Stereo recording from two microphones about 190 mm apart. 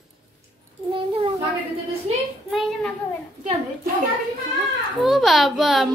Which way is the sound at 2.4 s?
Centre (ahead or behind).